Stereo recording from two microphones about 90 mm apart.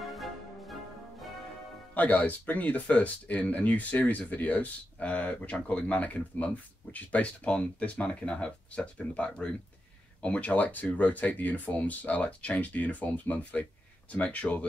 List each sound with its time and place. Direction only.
0.0 s music: centre (ahead or behind)
2.0 s speech: 15° left (ahead or behind)